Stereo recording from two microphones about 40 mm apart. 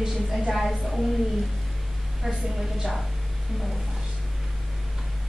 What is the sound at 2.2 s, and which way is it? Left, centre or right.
Speech, centre.